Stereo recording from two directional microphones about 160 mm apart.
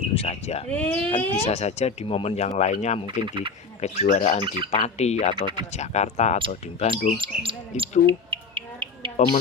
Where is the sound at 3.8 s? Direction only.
45° left (ahead or behind).